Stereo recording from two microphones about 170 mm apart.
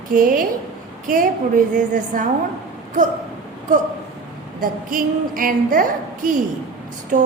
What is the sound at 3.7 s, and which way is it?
A woman's voice, 50° right (ahead or behind).